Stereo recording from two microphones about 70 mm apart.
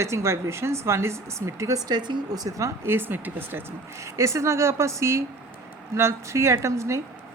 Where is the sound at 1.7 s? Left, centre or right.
Right.